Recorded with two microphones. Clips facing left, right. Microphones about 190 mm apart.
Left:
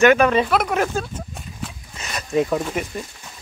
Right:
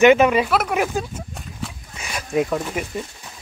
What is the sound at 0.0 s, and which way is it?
Speech, 20° right (ahead or behind).